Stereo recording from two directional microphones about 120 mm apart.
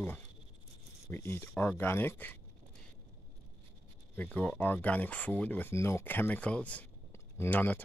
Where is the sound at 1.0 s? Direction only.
20° left (ahead or behind).